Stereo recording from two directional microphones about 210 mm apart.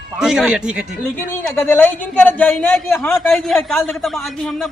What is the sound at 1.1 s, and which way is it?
A man's voice, 5° left (ahead or behind).